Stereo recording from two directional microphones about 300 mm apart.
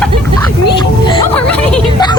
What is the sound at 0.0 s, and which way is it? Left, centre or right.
Vehicle, centre.